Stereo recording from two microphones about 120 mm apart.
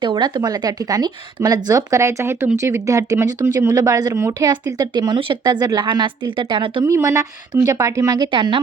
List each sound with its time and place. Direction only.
0.0 s speech: 40° right (ahead or behind)
6.8 s a woman's voice: 25° right (ahead or behind); by 8.6 s 40° right (ahead or behind)